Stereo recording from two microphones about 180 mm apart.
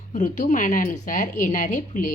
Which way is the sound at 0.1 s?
45° left (ahead or behind).